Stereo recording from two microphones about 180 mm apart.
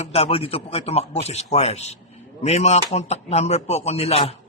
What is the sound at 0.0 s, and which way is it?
Speech, 35° left (ahead or behind).